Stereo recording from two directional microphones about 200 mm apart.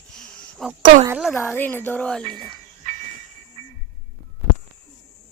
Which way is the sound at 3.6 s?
30° right (ahead or behind).